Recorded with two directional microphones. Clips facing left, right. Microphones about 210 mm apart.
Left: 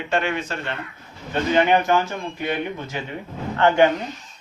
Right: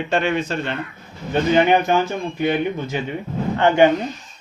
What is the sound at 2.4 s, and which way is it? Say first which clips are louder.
Speech: right 6 dB; 20° right (ahead or behind).